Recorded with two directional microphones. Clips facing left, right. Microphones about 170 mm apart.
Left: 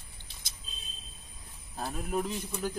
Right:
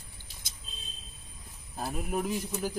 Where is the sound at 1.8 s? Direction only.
10° right (ahead or behind).